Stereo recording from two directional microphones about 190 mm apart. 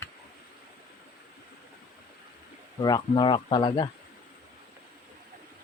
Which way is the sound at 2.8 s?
20° left (ahead or behind).